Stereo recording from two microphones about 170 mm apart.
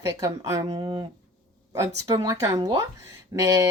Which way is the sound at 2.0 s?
25° right (ahead or behind).